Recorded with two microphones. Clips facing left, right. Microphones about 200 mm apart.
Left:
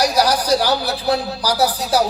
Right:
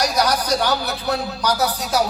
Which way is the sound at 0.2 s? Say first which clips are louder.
Left 3 dB; 30° left (ahead or behind).